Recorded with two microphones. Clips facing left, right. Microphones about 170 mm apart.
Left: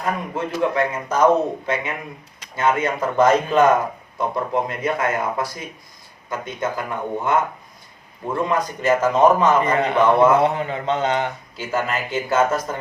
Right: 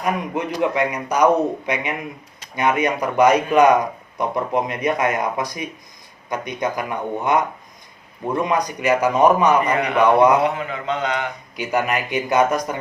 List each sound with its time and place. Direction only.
0.0 s speech: 15° right (ahead or behind)
9.7 s a man's voice: 25° left (ahead or behind)
10.0 s speech: 15° right (ahead or behind)
10.4 s speech: 30° left (ahead or behind)
11.5 s speech: 15° right (ahead or behind)